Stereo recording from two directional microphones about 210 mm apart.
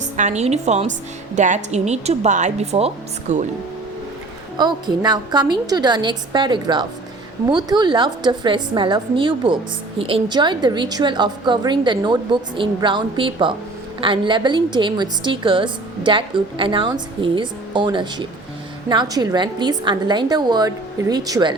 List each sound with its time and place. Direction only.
0.0 s a woman's voice: 35° right (ahead or behind)
4.5 s a woman's voice: 20° right (ahead or behind)